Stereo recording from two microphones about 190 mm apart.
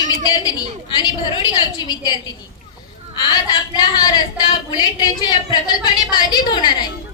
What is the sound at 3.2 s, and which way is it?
Speech, 20° left (ahead or behind).